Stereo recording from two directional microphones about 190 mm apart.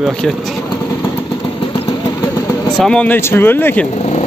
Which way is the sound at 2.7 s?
5° left (ahead or behind).